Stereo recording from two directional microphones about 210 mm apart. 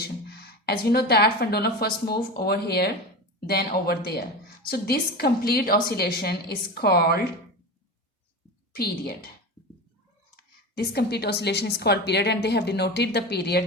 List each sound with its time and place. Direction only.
0.0 s a woman's voice: 50° left (ahead or behind)
8.7 s a woman's voice: 50° left (ahead or behind)
10.3 s a woman's voice: 50° left (ahead or behind)